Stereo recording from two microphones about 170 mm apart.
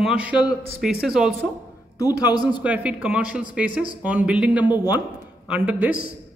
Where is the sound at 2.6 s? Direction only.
10° right (ahead or behind).